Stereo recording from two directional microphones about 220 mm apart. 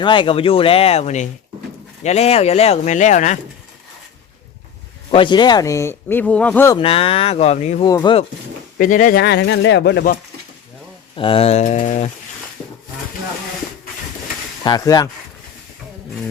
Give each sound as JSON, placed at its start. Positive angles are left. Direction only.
{"t": 0.0, "sound": "speech", "side_deg": 20}
{"t": 5.1, "sound": "speech", "side_deg": 20}
{"t": 6.7, "sound": "speech", "side_deg": 25}
{"t": 7.9, "sound": "speech", "side_deg": 20}
{"t": 8.8, "sound": "speech", "side_deg": 40}
{"t": 11.1, "sound": "speech", "side_deg": 25}
{"t": 14.6, "sound": "speech", "side_deg": 20}